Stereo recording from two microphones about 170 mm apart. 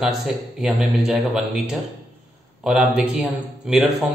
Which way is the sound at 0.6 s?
5° right (ahead or behind).